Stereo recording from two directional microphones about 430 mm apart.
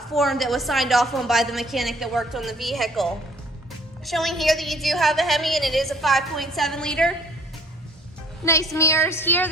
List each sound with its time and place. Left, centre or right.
0.1 s a woman's voice: centre
8.4 s a woman's voice: centre